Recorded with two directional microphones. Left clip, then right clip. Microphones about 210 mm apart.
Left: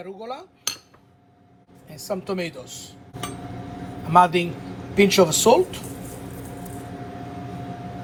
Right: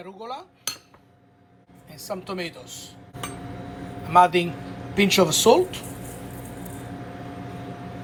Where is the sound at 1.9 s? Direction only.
5° right (ahead or behind).